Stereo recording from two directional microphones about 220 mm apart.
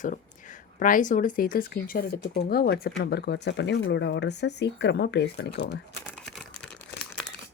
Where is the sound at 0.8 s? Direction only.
35° left (ahead or behind).